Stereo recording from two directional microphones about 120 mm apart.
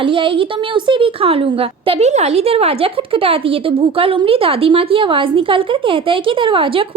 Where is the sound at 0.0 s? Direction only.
45° right (ahead or behind).